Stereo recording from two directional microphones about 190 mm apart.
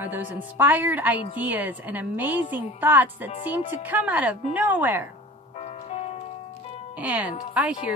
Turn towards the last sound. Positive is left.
turn(degrees=-5)  # may be behind; listen again after turning